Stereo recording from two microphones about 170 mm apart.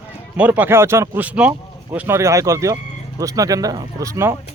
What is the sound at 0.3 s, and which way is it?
Speech, 10° right (ahead or behind).